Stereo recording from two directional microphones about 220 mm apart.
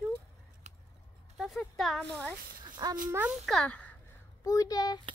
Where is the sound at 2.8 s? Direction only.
15° right (ahead or behind).